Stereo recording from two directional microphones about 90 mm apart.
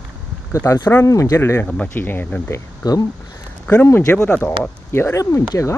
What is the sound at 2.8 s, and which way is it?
Speech, 45° left (ahead or behind).